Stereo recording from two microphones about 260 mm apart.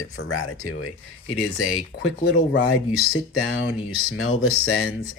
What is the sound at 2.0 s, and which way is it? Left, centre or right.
Speech, left.